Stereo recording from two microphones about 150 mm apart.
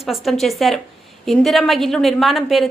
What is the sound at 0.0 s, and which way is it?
A woman's voice, centre (ahead or behind).